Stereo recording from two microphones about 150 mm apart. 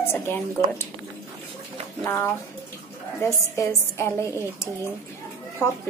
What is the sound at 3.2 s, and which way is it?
Speech, 20° left (ahead or behind).